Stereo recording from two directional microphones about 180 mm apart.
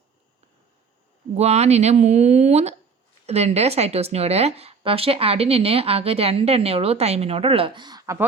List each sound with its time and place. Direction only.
1.4 s a woman's voice: 35° right (ahead or behind); by 8.2 s 20° right (ahead or behind)